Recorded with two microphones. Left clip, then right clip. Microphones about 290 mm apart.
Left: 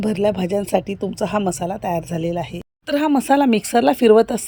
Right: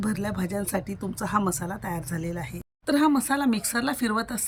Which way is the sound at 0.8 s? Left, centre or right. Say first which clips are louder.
Left 11 dB; centre.